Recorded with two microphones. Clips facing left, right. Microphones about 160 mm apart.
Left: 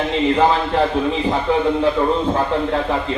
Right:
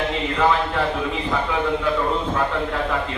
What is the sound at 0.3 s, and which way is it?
Speech, 30° left (ahead or behind).